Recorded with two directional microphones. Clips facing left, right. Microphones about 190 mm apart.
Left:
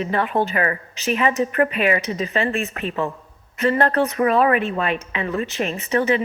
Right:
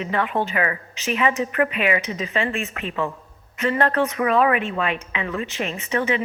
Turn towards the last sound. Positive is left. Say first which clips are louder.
# left 3 dB
turn(degrees=40)  # may be behind; listen again after turning